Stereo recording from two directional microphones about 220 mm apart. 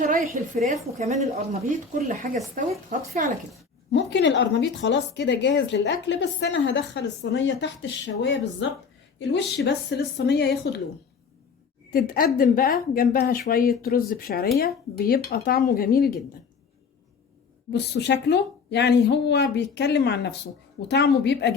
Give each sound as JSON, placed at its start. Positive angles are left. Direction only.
{"t": 0.0, "sound": "a sound", "side_deg": -35}
{"t": 0.7, "sound": "speech", "side_deg": -35}
{"t": 3.9, "sound": "a woman's voice", "side_deg": 55}
{"t": 11.9, "sound": "a woman's voice", "side_deg": 40}
{"t": 17.7, "sound": "a woman's voice", "side_deg": 50}